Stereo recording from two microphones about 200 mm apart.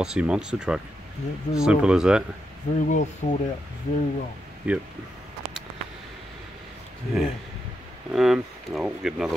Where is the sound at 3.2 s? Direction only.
35° left (ahead or behind).